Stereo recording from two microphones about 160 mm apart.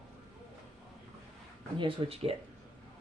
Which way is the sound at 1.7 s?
35° right (ahead or behind).